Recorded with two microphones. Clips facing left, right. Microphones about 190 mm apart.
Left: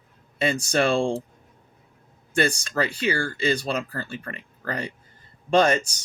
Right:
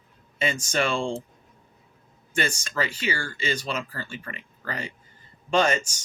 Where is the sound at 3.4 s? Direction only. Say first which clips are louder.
Left 4 dB; 40° left (ahead or behind).